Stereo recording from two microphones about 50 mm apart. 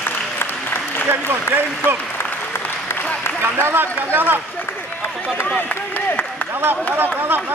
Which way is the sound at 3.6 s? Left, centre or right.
Right.